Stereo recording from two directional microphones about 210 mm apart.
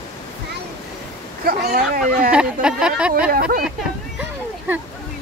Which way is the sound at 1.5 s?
45° right (ahead or behind).